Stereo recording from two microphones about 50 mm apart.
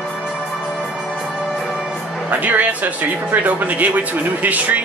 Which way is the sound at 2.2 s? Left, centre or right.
Right.